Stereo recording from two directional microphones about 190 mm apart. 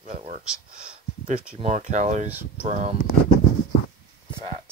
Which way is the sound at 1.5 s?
40° right (ahead or behind).